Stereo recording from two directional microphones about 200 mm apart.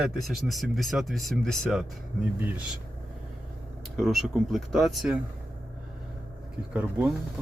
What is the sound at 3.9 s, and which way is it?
Speech, centre (ahead or behind).